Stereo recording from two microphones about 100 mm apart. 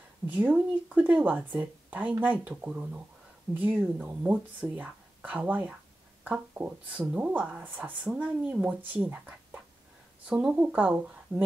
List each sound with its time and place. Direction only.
0.3 s speech: 15° right (ahead or behind)